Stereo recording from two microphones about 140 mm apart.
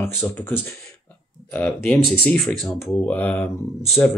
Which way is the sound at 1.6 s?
Centre (ahead or behind).